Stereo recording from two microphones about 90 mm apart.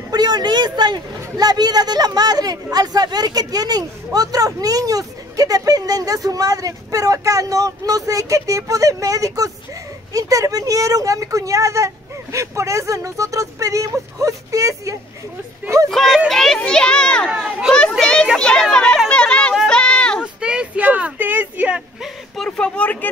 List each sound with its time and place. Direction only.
0.1 s a woman's voice: 50° right (ahead or behind)
15.9 s a child's voice: centre (ahead or behind)
19.0 s chatter: 15° left (ahead or behind)
19.5 s a sound: 10° left (ahead or behind)
20.3 s speech: 10° right (ahead or behind)
22.3 s a child's voice: 5° left (ahead or behind)